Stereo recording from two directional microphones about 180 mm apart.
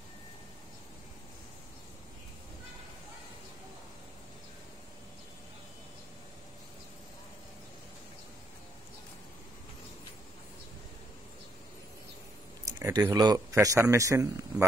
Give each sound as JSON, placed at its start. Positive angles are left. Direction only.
{"t": 12.6, "sound": "a man's voice", "side_deg": -15}